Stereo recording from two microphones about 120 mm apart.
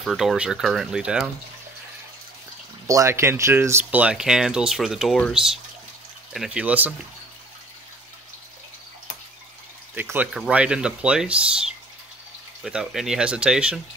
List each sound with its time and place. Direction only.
0.0 s speech: centre (ahead or behind)
2.9 s speech: 25° right (ahead or behind); by 6.6 s centre (ahead or behind)
6.6 s speech: 15° right (ahead or behind)
9.9 s speech: 15° right (ahead or behind)